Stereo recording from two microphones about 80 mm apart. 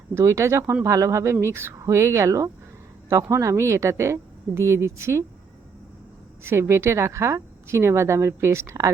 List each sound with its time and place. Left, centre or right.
0.1 s a woman's voice: right
6.4 s a woman's voice: right